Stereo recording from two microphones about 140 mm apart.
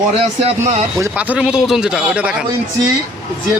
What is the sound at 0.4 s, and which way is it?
Speech, 55° right (ahead or behind).